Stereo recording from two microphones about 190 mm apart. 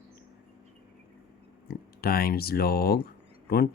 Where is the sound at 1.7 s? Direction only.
50° left (ahead or behind).